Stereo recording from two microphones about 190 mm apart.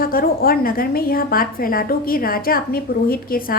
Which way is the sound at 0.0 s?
50° left (ahead or behind).